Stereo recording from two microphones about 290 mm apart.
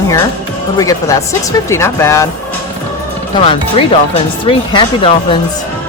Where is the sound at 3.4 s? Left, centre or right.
Centre.